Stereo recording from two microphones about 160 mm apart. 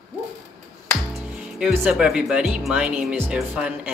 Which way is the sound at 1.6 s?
5° right (ahead or behind).